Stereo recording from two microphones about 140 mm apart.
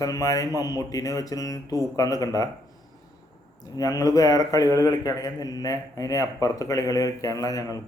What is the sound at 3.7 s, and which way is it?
A man's voice, 25° left (ahead or behind).